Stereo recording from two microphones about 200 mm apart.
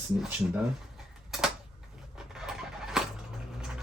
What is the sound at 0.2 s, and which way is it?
Speech, 5° right (ahead or behind).